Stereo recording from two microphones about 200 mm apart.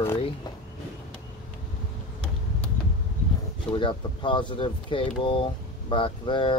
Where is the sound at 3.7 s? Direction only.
25° left (ahead or behind).